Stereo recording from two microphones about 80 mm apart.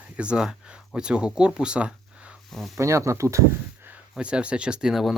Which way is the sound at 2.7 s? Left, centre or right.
Right.